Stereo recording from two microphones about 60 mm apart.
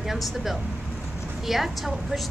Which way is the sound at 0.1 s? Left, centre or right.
Centre.